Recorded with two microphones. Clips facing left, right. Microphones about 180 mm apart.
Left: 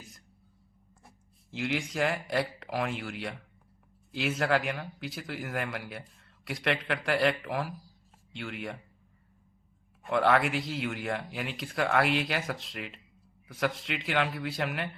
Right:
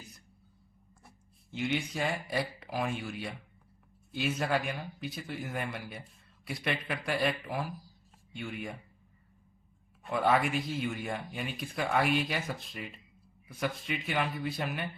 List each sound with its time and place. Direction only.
1.5 s speech: 90° left
6.4 s speech: 90° left
10.1 s speech: 75° left (ahead or behind)